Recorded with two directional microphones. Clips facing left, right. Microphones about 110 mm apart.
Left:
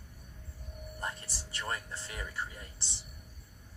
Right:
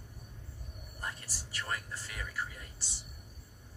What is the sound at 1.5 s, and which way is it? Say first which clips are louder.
Speech: left 1 dB; 25° left (ahead or behind).